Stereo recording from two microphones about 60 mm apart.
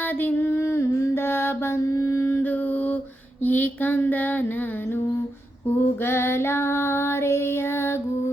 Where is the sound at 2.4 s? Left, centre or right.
Left.